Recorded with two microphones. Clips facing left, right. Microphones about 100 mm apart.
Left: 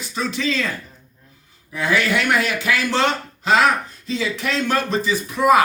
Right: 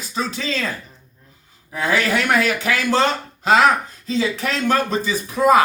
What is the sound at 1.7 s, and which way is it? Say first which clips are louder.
Speech: even; 40° right (ahead or behind).